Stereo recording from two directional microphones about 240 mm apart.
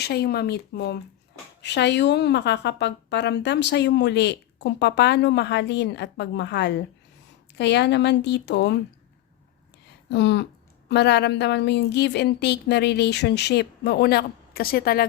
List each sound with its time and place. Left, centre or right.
0.0 s a woman's voice: left
10.1 s a woman's voice: left